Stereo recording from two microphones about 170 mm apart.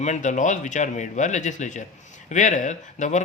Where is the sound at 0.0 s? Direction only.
45° left (ahead or behind).